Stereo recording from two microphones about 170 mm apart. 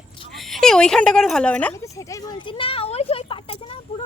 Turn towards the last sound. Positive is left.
turn(degrees=35)  # may be behind; listen again after turning